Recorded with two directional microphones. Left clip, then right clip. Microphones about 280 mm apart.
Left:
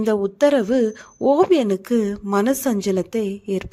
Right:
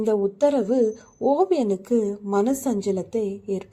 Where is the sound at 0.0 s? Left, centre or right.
Left.